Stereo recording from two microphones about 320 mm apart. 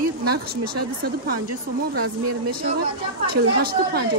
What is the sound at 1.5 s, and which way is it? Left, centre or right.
Speech, right.